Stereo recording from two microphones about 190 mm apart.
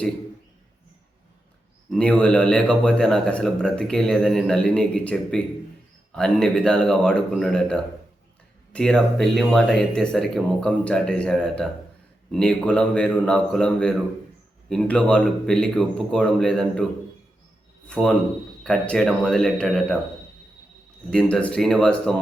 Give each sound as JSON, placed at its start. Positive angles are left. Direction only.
{"t": 1.9, "sound": "speech", "side_deg": 5}
{"t": 17.8, "sound": "speech", "side_deg": 5}
{"t": 21.1, "sound": "speech", "side_deg": 5}